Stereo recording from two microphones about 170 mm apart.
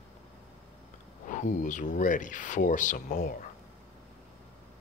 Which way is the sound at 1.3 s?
50° left (ahead or behind).